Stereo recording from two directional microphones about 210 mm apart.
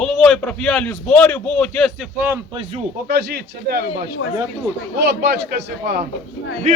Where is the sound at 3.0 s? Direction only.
50° right (ahead or behind).